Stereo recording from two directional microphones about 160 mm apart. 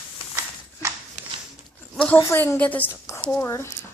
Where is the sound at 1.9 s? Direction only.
10° left (ahead or behind).